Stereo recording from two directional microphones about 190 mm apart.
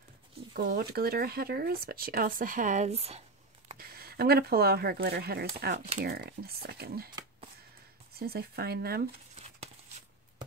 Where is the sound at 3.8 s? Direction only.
55° right (ahead or behind).